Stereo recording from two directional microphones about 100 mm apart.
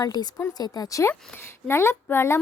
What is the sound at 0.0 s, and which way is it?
Speech, 40° left (ahead or behind).